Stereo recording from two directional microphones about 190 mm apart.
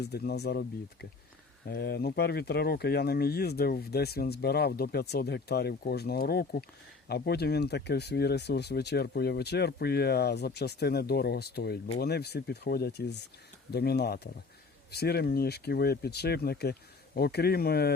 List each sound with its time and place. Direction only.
0.0 s speech: 60° left (ahead or behind)